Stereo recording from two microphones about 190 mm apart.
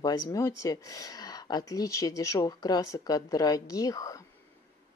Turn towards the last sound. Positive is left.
turn(degrees=20)  # may be behind; listen again after turning